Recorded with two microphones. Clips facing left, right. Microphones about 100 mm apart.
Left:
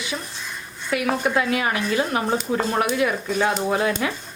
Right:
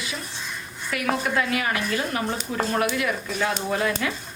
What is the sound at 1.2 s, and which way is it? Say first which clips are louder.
A woman's voice: left 3 dB; 25° left (ahead or behind).